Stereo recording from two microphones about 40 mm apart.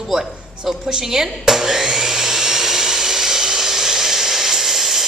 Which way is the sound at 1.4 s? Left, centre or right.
Centre.